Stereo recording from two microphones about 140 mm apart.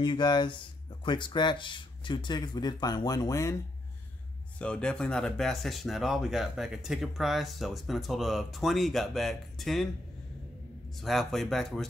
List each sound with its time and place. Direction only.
0.0 s speech: 35° left (ahead or behind)
4.6 s speech: 5° left (ahead or behind)
11.0 s speech: centre (ahead or behind)